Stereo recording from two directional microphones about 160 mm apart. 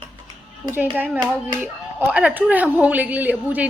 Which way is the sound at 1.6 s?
10° right (ahead or behind).